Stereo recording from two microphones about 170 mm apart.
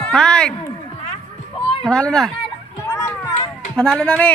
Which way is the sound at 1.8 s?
5° left (ahead or behind).